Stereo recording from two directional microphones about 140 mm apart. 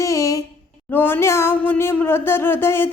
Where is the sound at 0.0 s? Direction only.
20° left (ahead or behind).